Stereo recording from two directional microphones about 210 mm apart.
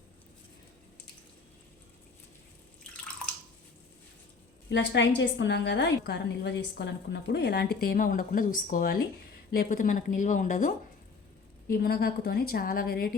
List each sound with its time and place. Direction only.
4.7 s a woman's voice: 60° left (ahead or behind); by 13.1 s 45° left (ahead or behind)